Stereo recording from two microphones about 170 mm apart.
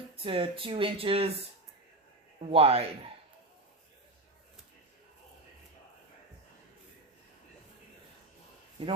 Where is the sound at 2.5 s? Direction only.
35° right (ahead or behind).